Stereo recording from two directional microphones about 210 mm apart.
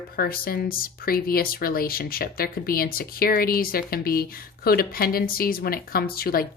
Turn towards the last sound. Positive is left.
turn(degrees=45)  # may be behind; listen again after turning